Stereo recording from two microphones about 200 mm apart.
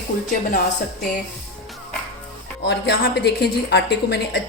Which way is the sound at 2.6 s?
55° left (ahead or behind).